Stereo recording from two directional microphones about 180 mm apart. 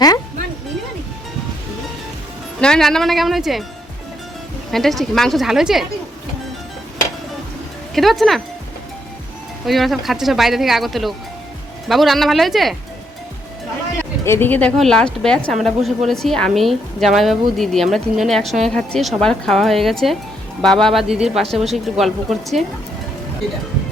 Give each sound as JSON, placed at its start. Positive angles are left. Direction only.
{"t": 2.6, "sound": "a woman's voice", "side_deg": 5}
{"t": 4.7, "sound": "a woman's voice", "side_deg": 0}
{"t": 7.9, "sound": "a woman's voice", "side_deg": 0}
{"t": 9.6, "sound": "a woman's voice", "side_deg": 0}
{"t": 14.3, "sound": "a woman's voice", "side_deg": 10}